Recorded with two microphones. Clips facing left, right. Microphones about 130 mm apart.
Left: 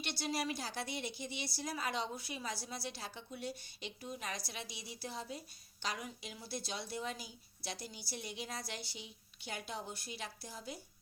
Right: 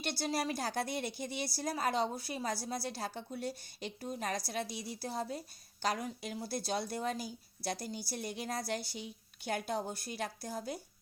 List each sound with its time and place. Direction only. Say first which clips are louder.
0.0 s speech: right 3 dB; 40° right (ahead or behind)